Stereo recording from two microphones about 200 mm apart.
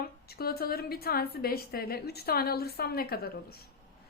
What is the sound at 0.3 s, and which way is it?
A woman's voice, 50° left (ahead or behind).